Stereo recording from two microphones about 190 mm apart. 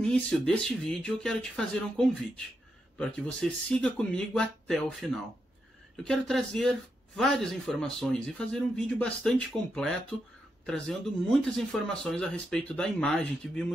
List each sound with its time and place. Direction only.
0.0 s speech: 5° left (ahead or behind)